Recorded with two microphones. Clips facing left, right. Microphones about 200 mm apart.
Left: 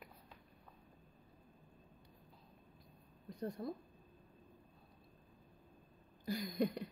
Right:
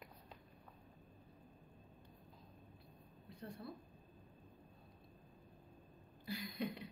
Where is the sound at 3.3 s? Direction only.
40° left (ahead or behind).